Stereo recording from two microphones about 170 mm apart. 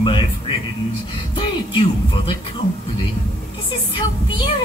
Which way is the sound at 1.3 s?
30° left (ahead or behind).